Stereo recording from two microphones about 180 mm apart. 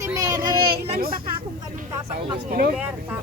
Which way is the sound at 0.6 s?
55° right (ahead or behind).